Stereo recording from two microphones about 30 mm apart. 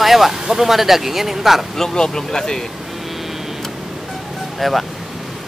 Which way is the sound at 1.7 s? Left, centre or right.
Centre.